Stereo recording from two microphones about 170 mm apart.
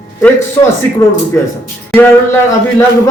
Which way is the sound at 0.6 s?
25° left (ahead or behind).